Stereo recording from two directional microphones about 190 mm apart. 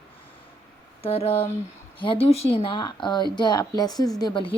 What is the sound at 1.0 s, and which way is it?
A woman's voice, 30° left (ahead or behind).